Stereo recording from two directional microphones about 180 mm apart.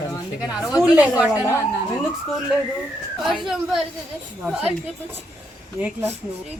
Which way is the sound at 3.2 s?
Centre (ahead or behind).